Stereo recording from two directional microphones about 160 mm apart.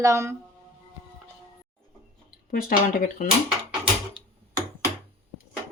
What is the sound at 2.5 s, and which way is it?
Speech, 60° left (ahead or behind).